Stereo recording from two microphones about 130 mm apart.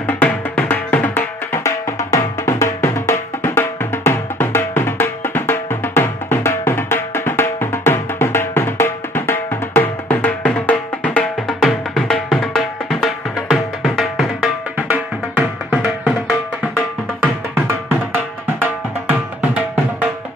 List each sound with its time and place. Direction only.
0.0 s music: 15° left (ahead or behind); by 16.1 s 5° right (ahead or behind)
17.6 s music: 15° right (ahead or behind)